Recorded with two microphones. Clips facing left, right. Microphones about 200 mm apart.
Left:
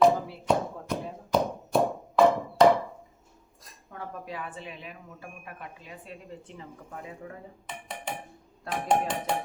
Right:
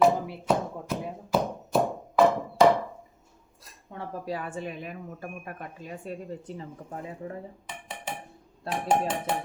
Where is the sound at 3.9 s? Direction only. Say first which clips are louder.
Right 5 dB; 30° right (ahead or behind).